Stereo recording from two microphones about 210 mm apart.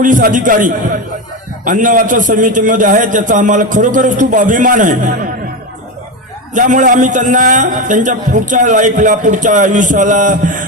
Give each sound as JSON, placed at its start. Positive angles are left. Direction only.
{"t": 0.0, "sound": "a man's voice", "side_deg": -40}
{"t": 6.5, "sound": "a man's voice", "side_deg": -35}